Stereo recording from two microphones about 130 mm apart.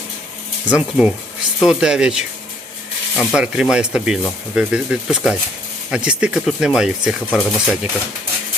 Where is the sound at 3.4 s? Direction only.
5° right (ahead or behind).